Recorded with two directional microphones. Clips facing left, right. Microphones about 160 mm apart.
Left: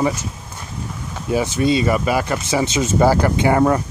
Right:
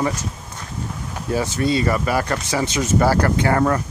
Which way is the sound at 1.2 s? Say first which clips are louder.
Left 3 dB; 20° left (ahead or behind).